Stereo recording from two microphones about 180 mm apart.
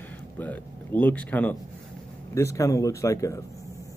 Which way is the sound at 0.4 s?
10° left (ahead or behind).